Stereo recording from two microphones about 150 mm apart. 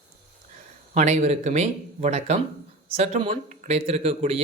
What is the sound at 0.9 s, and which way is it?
Speech, 50° right (ahead or behind).